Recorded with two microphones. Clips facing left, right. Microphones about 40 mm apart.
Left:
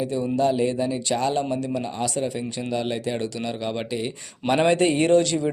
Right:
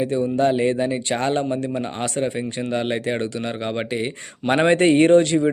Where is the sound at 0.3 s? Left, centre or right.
Right.